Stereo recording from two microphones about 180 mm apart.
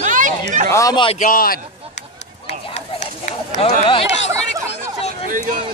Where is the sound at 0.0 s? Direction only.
45° right (ahead or behind).